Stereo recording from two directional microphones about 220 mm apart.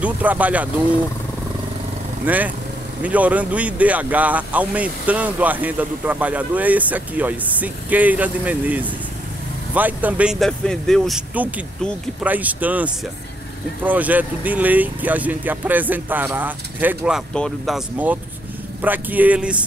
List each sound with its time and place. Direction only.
0.0 s speech: 5° right (ahead or behind)
2.2 s speech: 5° right (ahead or behind)